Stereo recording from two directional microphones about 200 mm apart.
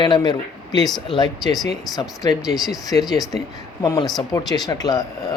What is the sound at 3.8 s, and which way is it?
A man's voice, 15° left (ahead or behind).